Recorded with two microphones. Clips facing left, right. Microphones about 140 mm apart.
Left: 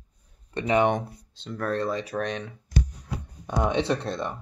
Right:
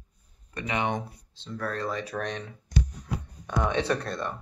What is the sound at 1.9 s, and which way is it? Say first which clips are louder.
Speech: left 3 dB; 25° left (ahead or behind).